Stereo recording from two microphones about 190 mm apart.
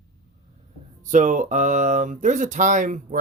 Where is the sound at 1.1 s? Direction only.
40° right (ahead or behind).